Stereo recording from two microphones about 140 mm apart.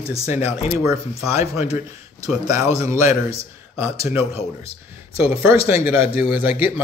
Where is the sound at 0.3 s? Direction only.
15° right (ahead or behind).